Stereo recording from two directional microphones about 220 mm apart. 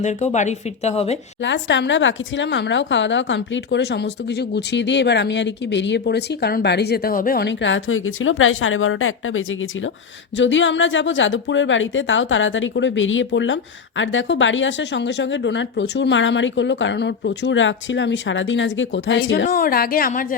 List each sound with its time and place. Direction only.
0.0 s speech: 30° left (ahead or behind)
1.4 s a woman's voice: 55° left (ahead or behind)
19.5 s speech: 40° left (ahead or behind)